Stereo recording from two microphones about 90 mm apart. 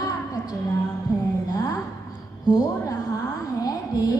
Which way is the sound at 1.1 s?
45° left (ahead or behind).